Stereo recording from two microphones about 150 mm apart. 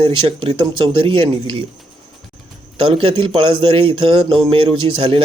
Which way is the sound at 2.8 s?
40° right (ahead or behind).